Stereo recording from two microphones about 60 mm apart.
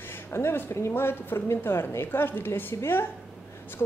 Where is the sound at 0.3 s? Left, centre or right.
Left.